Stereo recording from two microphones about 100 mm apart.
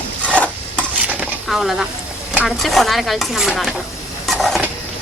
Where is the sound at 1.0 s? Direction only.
15° right (ahead or behind).